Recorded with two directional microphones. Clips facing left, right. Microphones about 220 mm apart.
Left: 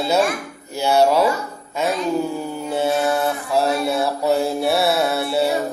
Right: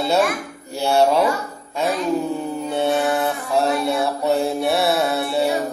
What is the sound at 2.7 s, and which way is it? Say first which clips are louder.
Mantra: left 1 dB; centre (ahead or behind).